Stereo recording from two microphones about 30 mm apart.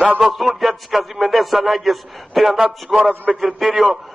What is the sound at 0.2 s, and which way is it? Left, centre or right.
A man's voice, centre.